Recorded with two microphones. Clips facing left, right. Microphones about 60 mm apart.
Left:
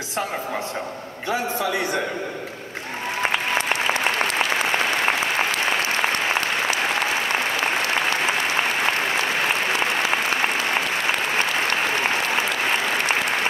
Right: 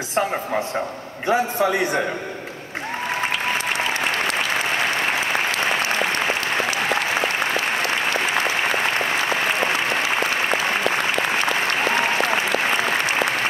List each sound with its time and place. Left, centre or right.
1.2 s a man's voice: right